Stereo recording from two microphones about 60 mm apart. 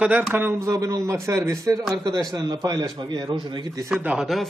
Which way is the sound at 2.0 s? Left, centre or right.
Right.